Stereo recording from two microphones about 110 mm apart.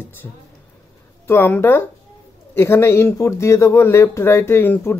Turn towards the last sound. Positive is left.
turn(degrees=20)  # may be behind; listen again after turning